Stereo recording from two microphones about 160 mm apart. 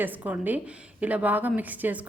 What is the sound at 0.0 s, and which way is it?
A woman's voice, 10° right (ahead or behind).